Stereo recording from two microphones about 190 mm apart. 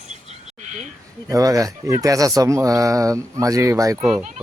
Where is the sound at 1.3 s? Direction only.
20° right (ahead or behind).